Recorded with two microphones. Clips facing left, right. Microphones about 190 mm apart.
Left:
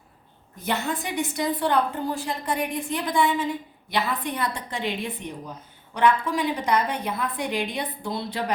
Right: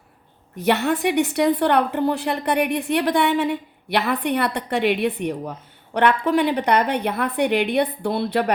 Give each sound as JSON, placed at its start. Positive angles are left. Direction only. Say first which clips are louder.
{"t": 0.5, "sound": "a woman's voice", "louder": "right 8 dB", "side_deg": -70}